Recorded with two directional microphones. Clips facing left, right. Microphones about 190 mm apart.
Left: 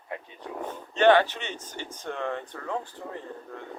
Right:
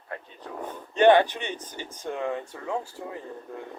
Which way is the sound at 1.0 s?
15° right (ahead or behind).